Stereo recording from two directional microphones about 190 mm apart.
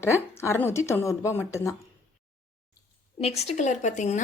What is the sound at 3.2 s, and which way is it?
A woman's voice, 35° left (ahead or behind).